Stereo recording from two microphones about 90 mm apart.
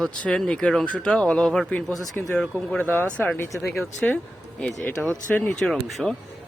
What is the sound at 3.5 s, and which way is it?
Speech, centre (ahead or behind).